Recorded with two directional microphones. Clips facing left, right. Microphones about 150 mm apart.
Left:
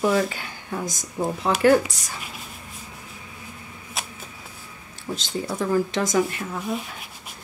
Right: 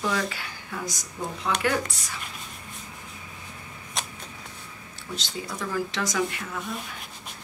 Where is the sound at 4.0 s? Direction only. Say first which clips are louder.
Even; 5° left (ahead or behind).